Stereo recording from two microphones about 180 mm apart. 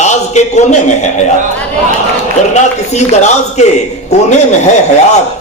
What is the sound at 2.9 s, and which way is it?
A man's voice, 40° left (ahead or behind).